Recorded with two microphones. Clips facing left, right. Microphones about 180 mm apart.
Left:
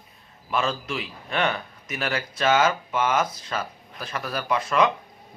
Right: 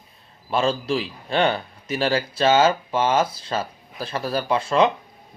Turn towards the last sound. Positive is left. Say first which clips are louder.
# right 3 dB
turn(degrees=-30)  # may be behind; listen again after turning